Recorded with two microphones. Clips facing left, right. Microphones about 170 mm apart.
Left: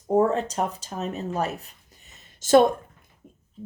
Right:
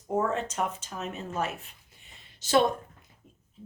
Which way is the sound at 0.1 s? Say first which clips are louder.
Left 7 dB; 35° left (ahead or behind).